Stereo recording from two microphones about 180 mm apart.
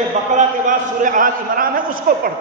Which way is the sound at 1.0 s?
50° right (ahead or behind).